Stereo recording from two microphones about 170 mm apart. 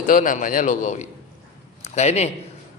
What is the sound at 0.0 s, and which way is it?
A man's voice, 50° left (ahead or behind).